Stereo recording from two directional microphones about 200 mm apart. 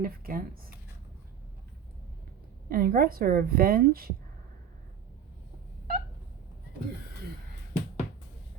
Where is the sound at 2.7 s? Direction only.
45° right (ahead or behind).